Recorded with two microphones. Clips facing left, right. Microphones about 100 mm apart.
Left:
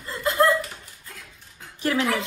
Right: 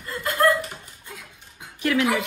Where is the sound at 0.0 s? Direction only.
25° left (ahead or behind).